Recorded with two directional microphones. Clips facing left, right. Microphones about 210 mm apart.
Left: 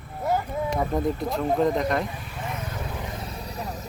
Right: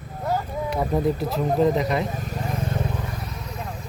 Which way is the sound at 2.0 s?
45° right (ahead or behind).